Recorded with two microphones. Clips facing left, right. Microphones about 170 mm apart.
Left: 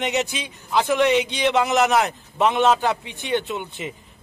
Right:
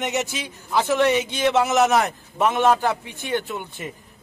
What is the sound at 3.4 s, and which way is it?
Speech, 20° left (ahead or behind).